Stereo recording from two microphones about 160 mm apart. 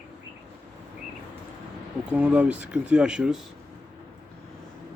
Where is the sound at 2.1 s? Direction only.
10° right (ahead or behind).